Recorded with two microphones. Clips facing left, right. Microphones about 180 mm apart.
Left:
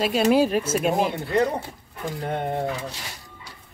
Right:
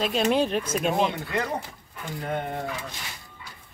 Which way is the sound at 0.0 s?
5° left (ahead or behind).